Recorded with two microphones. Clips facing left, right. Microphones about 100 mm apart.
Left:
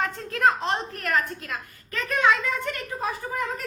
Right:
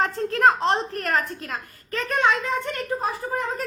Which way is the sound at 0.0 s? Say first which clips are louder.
Right 4 dB; 40° right (ahead or behind).